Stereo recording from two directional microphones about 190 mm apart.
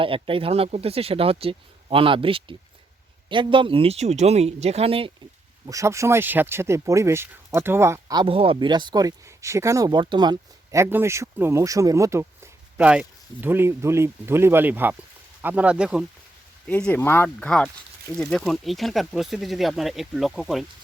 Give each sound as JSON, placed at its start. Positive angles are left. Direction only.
{"t": 0.0, "sound": "speech", "side_deg": -30}
{"t": 5.6, "sound": "speech", "side_deg": -15}
{"t": 16.6, "sound": "speech", "side_deg": 5}